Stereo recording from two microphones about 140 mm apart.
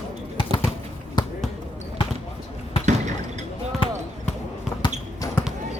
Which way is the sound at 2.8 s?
60° right (ahead or behind).